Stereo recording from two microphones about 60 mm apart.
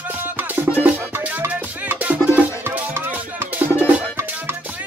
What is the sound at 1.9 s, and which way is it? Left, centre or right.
Music, right.